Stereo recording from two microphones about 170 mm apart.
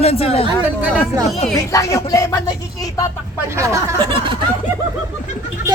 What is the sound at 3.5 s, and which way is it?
Speech, 15° right (ahead or behind).